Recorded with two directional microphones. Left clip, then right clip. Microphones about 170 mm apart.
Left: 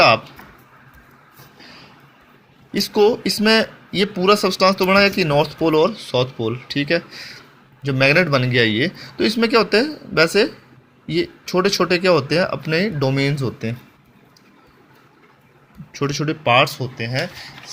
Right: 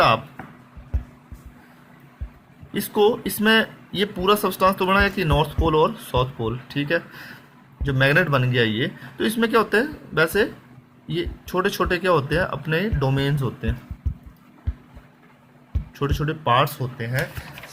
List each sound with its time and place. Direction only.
2.9 s speech: 20° left (ahead or behind)
15.9 s speech: 25° left (ahead or behind)